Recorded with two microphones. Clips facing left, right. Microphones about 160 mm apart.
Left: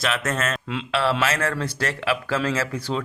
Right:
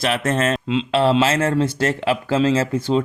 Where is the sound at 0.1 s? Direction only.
30° right (ahead or behind).